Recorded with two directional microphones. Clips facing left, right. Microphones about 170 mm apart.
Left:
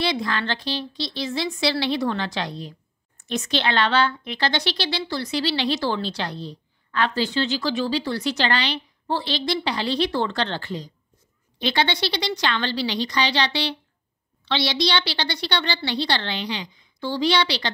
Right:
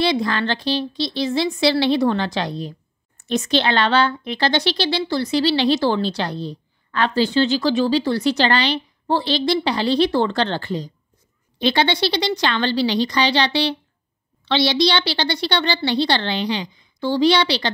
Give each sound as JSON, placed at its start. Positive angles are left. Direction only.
{"t": 0.0, "sound": "speech", "side_deg": -30}